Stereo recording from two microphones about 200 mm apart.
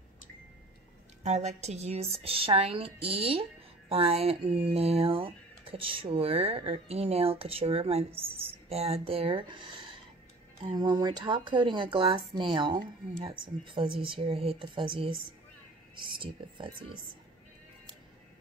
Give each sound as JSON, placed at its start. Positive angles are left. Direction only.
{"t": 1.2, "sound": "a woman's voice", "side_deg": -35}
{"t": 16.2, "sound": "speech", "side_deg": -25}